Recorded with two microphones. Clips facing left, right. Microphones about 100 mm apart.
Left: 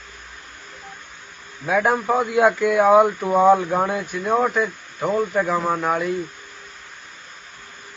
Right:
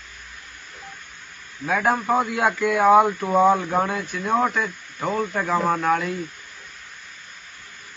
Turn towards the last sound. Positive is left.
turn(degrees=5)  # may be behind; listen again after turning